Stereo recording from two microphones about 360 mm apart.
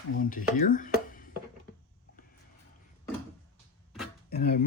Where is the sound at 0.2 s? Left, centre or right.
Left.